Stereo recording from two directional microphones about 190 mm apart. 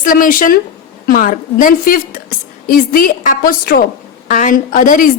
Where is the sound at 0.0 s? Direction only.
45° left (ahead or behind).